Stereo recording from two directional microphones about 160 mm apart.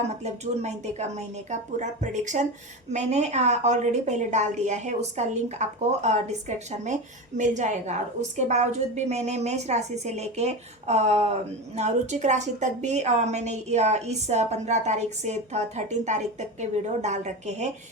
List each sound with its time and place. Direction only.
0.2 s a woman's voice: 45° right (ahead or behind)